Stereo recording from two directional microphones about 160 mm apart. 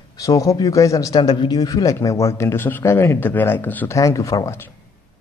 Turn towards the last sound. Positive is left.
turn(degrees=15)  # may be behind; listen again after turning